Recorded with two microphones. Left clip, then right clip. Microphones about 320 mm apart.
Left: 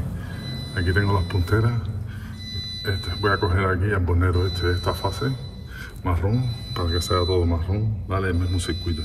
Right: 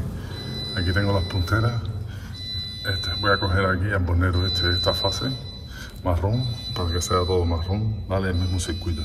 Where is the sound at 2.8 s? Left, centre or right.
Centre.